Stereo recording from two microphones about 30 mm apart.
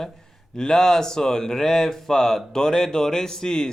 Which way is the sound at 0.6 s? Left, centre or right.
Centre.